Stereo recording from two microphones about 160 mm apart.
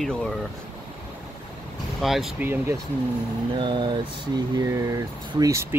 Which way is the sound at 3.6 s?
30° right (ahead or behind).